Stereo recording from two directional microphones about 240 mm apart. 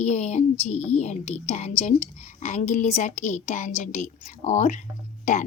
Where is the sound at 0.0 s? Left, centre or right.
Left.